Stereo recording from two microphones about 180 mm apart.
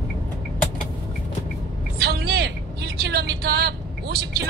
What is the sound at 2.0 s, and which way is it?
Vehicle, 65° right (ahead or behind).